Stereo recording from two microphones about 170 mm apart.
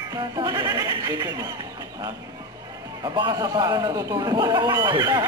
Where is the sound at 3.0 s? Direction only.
25° right (ahead or behind).